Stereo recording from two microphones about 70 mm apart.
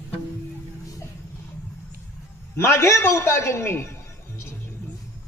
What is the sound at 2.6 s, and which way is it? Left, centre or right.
A man's voice, left.